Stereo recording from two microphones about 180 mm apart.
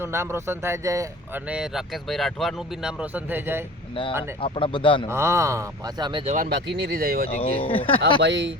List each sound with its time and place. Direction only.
0.0 s speech: 15° right (ahead or behind)
1.5 s speech: 5° right (ahead or behind)
4.4 s speech: 30° left (ahead or behind)
5.0 s speech: 15° right (ahead or behind)
6.2 s speech: 50° right (ahead or behind)
6.5 s speech: 65° right (ahead or behind)
7.3 s speech: 30° left (ahead or behind)
8.2 s speech: 85° right